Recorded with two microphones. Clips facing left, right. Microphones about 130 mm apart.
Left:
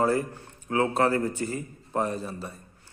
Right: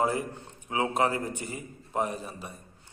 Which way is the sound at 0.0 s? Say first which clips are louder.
Left 3 dB; 15° right (ahead or behind).